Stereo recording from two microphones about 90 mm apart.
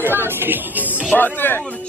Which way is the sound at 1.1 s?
20° left (ahead or behind).